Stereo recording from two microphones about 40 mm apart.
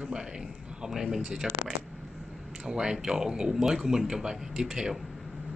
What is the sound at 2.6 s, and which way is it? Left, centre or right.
Speech, centre.